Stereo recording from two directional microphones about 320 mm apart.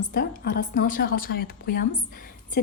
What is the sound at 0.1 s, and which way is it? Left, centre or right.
A woman's voice, left.